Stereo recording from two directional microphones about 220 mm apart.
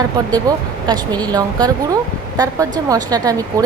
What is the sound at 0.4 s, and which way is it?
A woman's voice, 20° right (ahead or behind).